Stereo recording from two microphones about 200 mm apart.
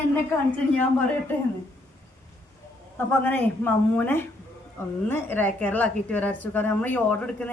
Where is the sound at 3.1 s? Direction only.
10° left (ahead or behind).